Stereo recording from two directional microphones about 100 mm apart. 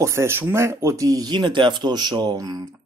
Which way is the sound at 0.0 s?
25° right (ahead or behind).